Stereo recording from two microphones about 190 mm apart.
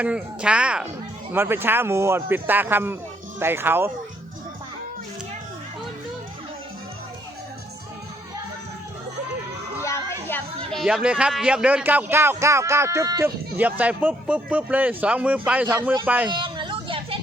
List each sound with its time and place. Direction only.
0.0 s speech: 5° right (ahead or behind)
9.8 s speech: 15° left (ahead or behind); by 16.3 s 10° right (ahead or behind)
16.3 s hubbub: 25° right (ahead or behind)